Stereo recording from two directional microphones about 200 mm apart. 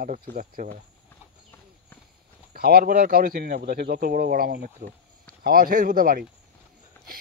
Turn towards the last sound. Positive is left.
turn(degrees=-45)  # may be behind; listen again after turning